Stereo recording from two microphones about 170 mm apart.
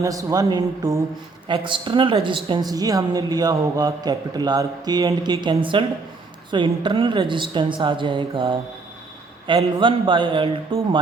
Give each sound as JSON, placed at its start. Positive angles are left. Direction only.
{"t": 0.0, "sound": "a woman's voice", "side_deg": -20}